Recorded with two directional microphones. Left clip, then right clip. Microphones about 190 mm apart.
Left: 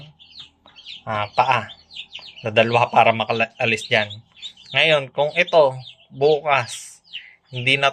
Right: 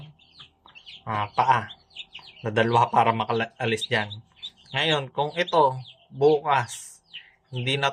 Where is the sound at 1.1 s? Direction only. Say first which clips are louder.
Left 3 dB; 15° right (ahead or behind).